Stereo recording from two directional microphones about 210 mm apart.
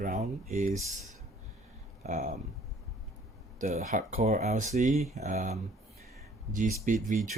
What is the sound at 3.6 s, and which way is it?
Speech, 40° right (ahead or behind).